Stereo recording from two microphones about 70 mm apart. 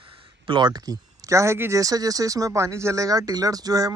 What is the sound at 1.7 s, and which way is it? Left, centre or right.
A man's voice, right.